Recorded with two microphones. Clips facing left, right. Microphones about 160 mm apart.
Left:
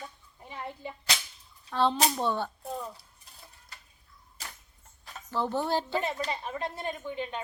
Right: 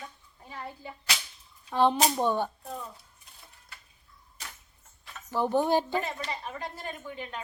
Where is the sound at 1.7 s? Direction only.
15° right (ahead or behind).